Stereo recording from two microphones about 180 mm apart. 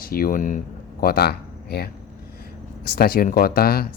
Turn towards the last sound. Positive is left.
turn(degrees=55)  # may be behind; listen again after turning